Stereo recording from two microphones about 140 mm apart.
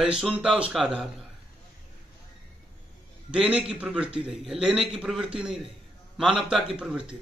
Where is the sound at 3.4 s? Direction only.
45° right (ahead or behind).